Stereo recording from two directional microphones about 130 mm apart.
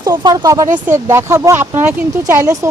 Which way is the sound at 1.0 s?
25° right (ahead or behind).